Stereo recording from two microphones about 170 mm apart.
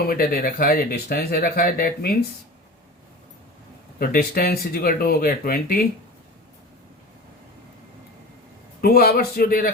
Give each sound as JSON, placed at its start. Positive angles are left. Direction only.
{"t": 0.0, "sound": "speech", "side_deg": 60}
{"t": 4.0, "sound": "speech", "side_deg": 60}
{"t": 8.8, "sound": "speech", "side_deg": 65}